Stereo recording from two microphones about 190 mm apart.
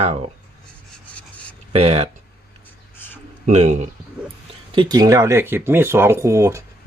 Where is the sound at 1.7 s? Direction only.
30° right (ahead or behind).